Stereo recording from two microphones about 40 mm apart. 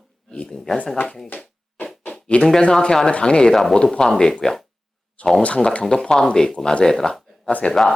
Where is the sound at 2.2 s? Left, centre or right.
Left; by 4.4 s centre.